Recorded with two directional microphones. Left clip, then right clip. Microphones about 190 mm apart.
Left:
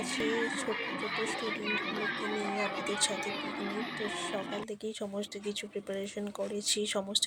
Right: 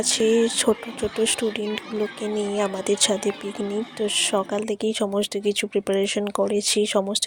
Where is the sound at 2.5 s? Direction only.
50° right (ahead or behind).